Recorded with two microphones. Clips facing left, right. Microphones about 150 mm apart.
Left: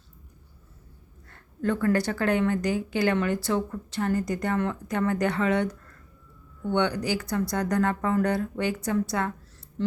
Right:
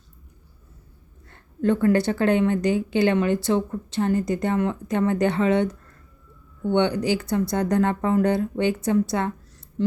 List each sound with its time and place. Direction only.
1.3 s a woman's voice: 20° right (ahead or behind)